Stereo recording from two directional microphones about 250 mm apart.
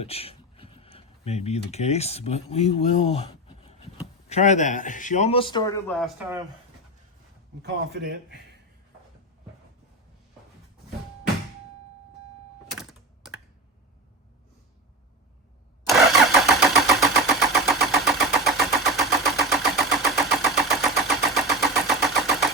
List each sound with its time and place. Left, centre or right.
0.0 s a man's voice: left
6.0 s speech: centre
7.6 s speech: right
12.7 s typing: centre
15.9 s vehicle: centre
21.3 s engine: centre